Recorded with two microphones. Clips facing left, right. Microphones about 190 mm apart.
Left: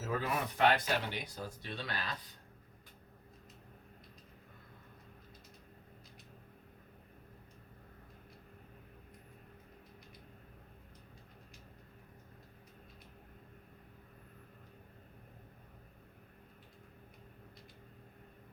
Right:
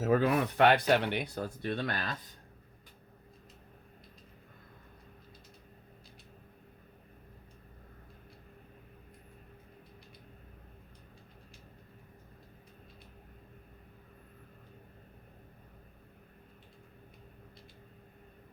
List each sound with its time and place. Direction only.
0.0 s speech: 65° right (ahead or behind)